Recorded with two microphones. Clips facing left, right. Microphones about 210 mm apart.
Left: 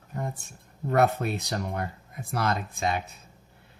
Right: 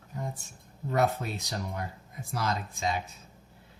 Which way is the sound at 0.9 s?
60° left (ahead or behind).